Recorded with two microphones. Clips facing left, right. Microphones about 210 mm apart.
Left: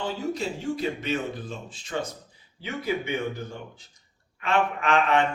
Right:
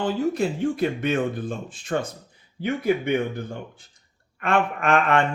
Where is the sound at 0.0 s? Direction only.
55° right (ahead or behind).